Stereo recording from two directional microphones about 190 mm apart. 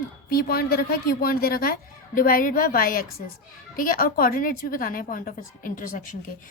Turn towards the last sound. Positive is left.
turn(degrees=45)  # may be behind; listen again after turning